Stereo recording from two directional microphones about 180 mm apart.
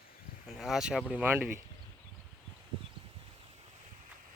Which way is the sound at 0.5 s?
Centre (ahead or behind).